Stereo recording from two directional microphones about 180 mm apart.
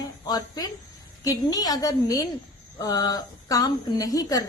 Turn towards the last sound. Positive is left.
turn(degrees=20)  # may be behind; listen again after turning